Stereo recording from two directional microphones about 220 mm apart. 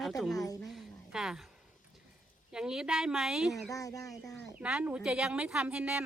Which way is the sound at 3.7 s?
15° left (ahead or behind).